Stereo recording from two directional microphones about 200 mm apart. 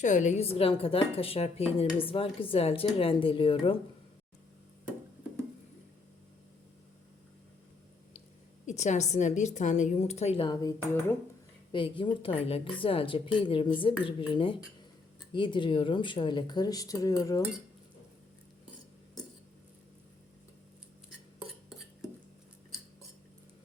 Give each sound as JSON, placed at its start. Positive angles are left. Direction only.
{"t": 0.0, "sound": "speech", "side_deg": 40}
{"t": 8.6, "sound": "a woman's voice", "side_deg": 35}